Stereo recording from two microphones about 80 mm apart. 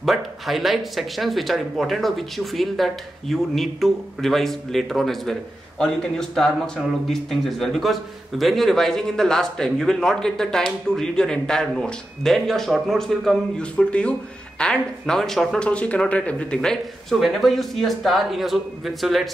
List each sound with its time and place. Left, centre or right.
0.0 s speech: centre
13.6 s speech: centre